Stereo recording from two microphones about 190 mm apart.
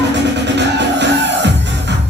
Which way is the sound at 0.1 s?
65° right (ahead or behind).